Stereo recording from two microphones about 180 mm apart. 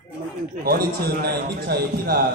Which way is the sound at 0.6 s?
55° right (ahead or behind).